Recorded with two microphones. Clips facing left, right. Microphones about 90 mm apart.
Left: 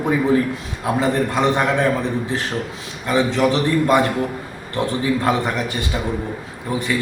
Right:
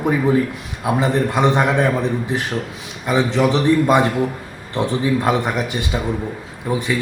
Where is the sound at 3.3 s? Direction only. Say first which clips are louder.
Right 2 dB; 20° right (ahead or behind).